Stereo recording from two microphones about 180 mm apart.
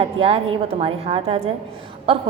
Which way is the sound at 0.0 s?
30° right (ahead or behind).